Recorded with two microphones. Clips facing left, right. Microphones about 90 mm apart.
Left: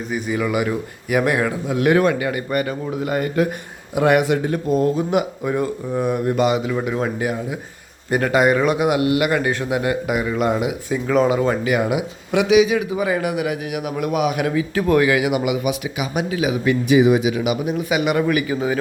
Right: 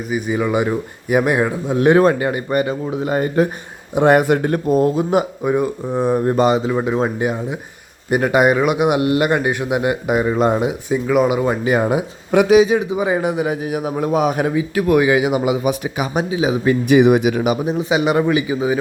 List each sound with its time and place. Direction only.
0.1 s a man's voice: 25° right (ahead or behind); by 4.9 s 50° right (ahead or behind)
5.4 s a man's voice: 20° right (ahead or behind)
9.4 s a man's voice: 20° right (ahead or behind)
11.0 s speech: 10° right (ahead or behind)
11.6 s speech: 35° right (ahead or behind)
12.9 s a man's voice: 20° right (ahead or behind)
14.5 s speech: 15° right (ahead or behind)
15.0 s a man's voice: 25° right (ahead or behind)
16.9 s speech: 55° right (ahead or behind); by 18.3 s 30° right (ahead or behind)
18.3 s speech: 20° right (ahead or behind)